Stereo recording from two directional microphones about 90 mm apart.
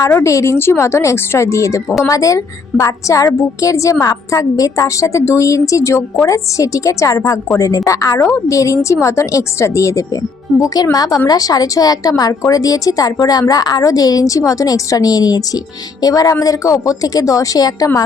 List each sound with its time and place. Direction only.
0.1 s a woman's voice: 30° left (ahead or behind)
10.9 s a woman's voice: 45° left (ahead or behind)